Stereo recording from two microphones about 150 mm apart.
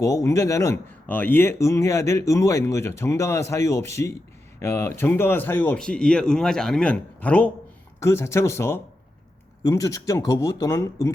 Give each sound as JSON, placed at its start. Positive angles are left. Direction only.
{"t": 0.0, "sound": "a man's voice", "side_deg": 20}